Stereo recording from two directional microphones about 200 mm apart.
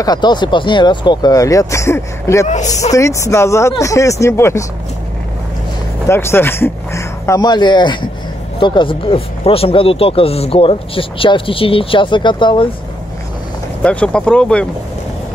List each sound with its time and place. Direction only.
0.0 s speech: 20° left (ahead or behind)
2.4 s a man's voice: 35° left (ahead or behind)
2.9 s speech: 15° left (ahead or behind)
6.0 s speech: 10° left (ahead or behind)
13.8 s speech: 5° left (ahead or behind)